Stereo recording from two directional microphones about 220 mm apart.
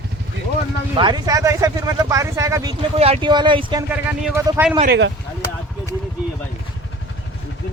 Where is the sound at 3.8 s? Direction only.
10° right (ahead or behind).